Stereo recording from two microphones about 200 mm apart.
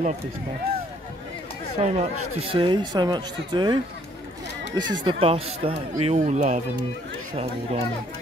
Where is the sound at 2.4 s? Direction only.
25° right (ahead or behind).